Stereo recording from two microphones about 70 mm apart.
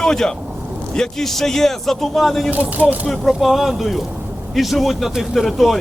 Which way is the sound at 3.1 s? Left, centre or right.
Centre.